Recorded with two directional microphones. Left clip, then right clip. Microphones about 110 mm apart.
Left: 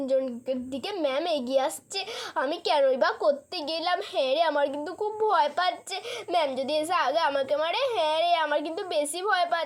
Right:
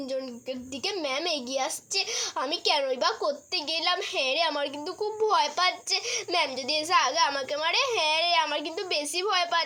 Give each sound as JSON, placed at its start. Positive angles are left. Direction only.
{"t": 1.0, "sound": "a child's voice", "side_deg": 25}